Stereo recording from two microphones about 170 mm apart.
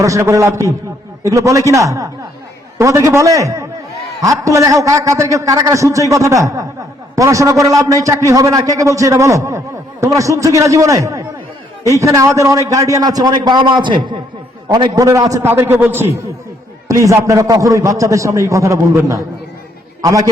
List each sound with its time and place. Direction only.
0.0 s a man's voice: 20° right (ahead or behind)